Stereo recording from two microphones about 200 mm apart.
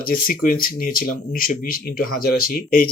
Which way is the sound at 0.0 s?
45° left (ahead or behind).